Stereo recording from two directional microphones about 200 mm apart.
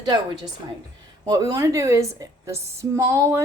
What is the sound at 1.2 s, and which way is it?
A woman's voice, 20° right (ahead or behind).